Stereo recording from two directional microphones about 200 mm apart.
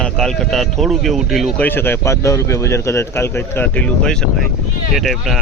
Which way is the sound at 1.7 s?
10° left (ahead or behind).